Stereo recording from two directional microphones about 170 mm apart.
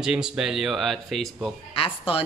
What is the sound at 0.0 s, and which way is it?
Speech, 5° right (ahead or behind).